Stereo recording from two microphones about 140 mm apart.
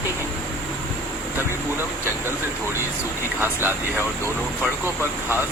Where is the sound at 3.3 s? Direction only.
15° right (ahead or behind).